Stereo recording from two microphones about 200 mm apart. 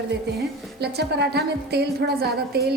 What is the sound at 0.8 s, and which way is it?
A woman's voice, 55° right (ahead or behind).